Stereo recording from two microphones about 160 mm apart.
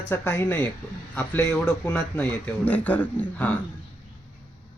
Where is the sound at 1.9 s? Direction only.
10° left (ahead or behind).